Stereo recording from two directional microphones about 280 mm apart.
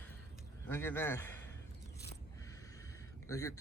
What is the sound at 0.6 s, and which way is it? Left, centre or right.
Speech, centre.